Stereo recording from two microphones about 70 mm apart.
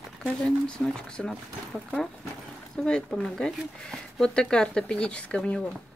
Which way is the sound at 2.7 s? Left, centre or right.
Centre.